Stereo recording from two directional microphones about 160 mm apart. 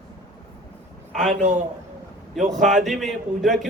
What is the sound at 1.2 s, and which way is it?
Speech, 50° right (ahead or behind).